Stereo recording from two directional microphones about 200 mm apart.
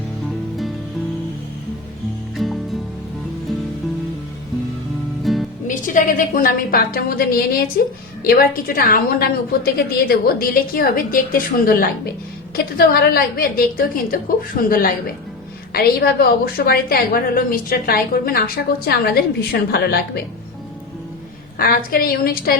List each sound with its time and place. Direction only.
2.3 s music: centre (ahead or behind)
5.2 s music: centre (ahead or behind)
5.6 s a woman's voice: 40° left (ahead or behind)
21.8 s a woman's voice: 45° left (ahead or behind)